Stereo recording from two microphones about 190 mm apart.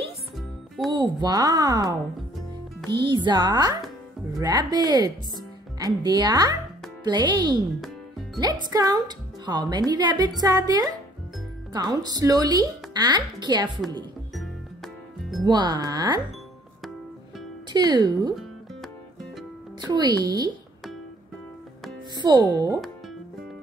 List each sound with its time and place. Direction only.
0.9 s a woman's voice: 20° right (ahead or behind)
8.6 s a woman's voice: 20° right (ahead or behind)
15.4 s a woman's voice: 25° right (ahead or behind)
17.7 s a woman's voice: 20° right (ahead or behind)
19.8 s a woman's voice: 20° right (ahead or behind)
22.1 s a woman's voice: 20° right (ahead or behind)